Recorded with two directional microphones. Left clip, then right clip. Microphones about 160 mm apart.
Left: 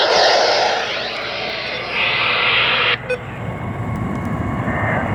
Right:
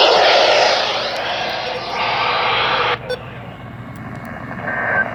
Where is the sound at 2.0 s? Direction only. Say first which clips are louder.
Left 1 dB; 40° right (ahead or behind).